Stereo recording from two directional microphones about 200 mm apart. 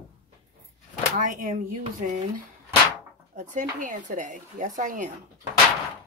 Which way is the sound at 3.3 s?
40° right (ahead or behind).